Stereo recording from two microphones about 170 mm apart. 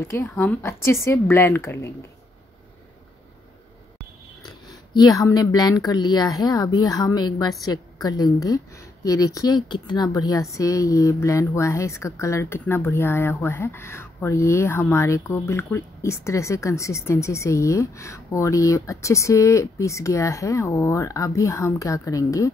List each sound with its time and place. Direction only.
0.1 s a woman's voice: 15° left (ahead or behind)
4.6 s a woman's voice: 25° left (ahead or behind)